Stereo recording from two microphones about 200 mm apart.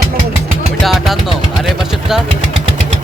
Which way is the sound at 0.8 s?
Centre (ahead or behind).